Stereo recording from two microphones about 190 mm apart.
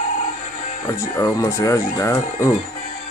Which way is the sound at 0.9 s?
15° left (ahead or behind).